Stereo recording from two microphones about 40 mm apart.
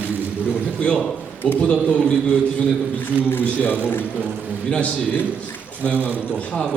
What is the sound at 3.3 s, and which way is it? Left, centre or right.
Speech, left.